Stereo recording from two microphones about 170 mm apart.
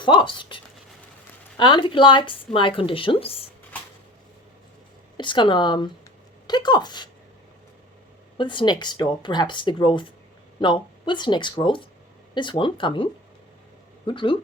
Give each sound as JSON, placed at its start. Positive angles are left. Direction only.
{"t": 0.0, "sound": "a woman's voice", "side_deg": 25}
{"t": 5.1, "sound": "a woman's voice", "side_deg": 30}
{"t": 8.4, "sound": "a woman's voice", "side_deg": 30}
{"t": 14.1, "sound": "a woman's voice", "side_deg": 30}